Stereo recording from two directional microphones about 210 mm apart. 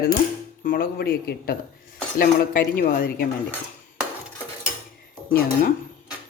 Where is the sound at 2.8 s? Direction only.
45° left (ahead or behind).